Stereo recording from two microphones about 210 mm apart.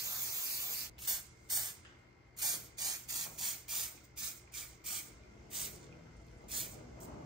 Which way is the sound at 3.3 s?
Centre (ahead or behind).